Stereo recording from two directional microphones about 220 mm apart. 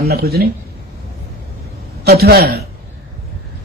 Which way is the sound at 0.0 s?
45° right (ahead or behind).